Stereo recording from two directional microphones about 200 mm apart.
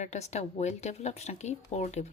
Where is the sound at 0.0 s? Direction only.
35° left (ahead or behind).